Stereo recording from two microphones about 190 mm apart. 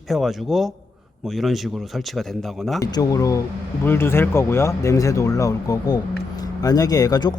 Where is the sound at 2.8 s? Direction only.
20° left (ahead or behind).